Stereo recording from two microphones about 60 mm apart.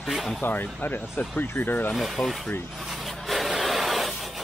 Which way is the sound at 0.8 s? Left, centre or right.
Left.